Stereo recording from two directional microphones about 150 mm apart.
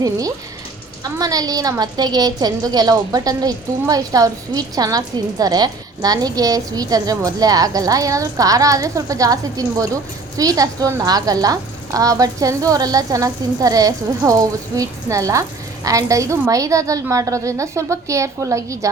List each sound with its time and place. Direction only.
0.0 s a woman's voice: 25° right (ahead or behind)